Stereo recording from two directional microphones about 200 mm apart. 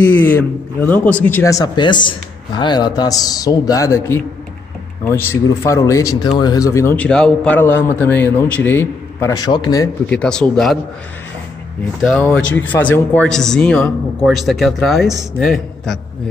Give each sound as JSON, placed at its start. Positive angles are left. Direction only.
{"t": 0.0, "sound": "speech", "side_deg": 10}
{"t": 10.0, "sound": "speech", "side_deg": 5}
{"t": 12.2, "sound": "speech", "side_deg": 10}